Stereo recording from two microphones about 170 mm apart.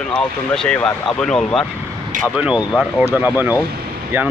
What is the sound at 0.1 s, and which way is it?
A man's voice, 5° left (ahead or behind).